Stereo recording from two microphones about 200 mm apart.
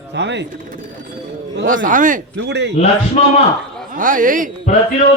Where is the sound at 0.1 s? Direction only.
60° right (ahead or behind).